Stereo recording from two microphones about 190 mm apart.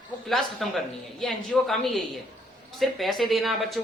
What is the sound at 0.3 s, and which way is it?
A man's voice, centre (ahead or behind).